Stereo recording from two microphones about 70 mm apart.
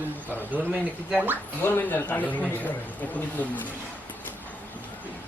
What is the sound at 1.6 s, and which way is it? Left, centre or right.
A man's voice, left.